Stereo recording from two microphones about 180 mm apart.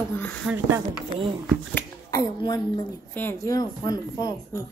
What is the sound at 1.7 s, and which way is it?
Speech, 20° left (ahead or behind).